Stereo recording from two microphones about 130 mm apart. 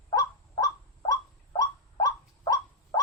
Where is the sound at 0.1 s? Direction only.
30° left (ahead or behind).